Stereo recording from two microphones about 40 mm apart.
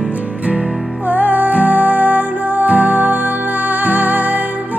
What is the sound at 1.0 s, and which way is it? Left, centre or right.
Music, right.